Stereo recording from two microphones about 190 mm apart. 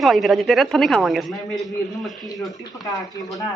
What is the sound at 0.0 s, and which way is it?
Speech, centre (ahead or behind).